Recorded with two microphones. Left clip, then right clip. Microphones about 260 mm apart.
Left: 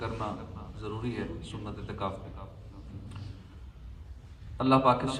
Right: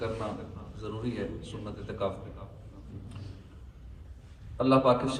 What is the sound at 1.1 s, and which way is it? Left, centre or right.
Speech, centre.